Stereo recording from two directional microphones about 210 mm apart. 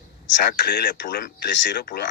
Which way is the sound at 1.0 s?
45° left (ahead or behind).